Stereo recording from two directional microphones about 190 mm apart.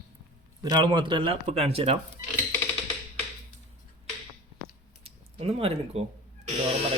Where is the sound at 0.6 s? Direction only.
20° right (ahead or behind).